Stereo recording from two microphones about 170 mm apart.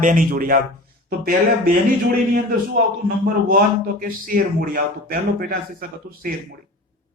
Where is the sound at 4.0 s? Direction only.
55° right (ahead or behind).